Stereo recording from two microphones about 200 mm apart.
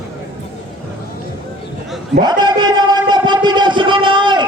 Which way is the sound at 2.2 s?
20° right (ahead or behind).